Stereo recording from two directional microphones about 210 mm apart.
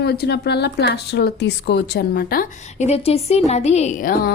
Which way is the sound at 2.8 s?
30° left (ahead or behind).